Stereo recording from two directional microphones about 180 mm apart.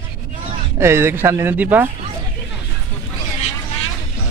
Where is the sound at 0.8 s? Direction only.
15° right (ahead or behind).